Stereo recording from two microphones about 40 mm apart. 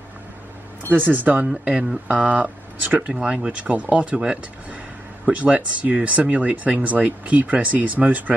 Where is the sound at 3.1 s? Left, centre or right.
Centre.